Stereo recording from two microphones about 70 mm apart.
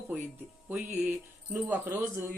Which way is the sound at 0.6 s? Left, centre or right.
Right.